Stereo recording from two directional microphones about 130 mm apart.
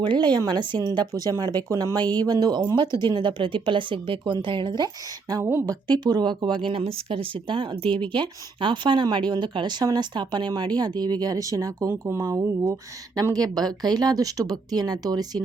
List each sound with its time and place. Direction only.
0.0 s a woman's voice: 40° right (ahead or behind)
5.3 s speech: 20° right (ahead or behind)
5.9 s a woman's voice: 30° right (ahead or behind)